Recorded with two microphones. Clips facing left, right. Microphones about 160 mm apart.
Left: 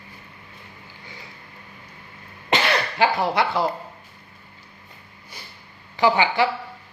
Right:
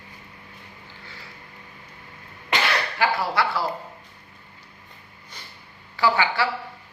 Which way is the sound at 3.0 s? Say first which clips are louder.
Left 3 dB; 20° left (ahead or behind).